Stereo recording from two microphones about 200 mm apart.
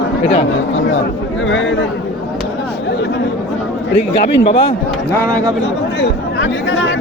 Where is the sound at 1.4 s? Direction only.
70° left (ahead or behind).